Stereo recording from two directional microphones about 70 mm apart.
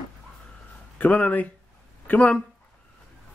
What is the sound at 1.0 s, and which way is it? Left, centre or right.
Speech, centre.